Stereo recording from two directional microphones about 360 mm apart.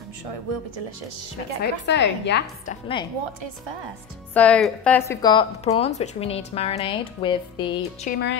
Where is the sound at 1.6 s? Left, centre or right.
Left.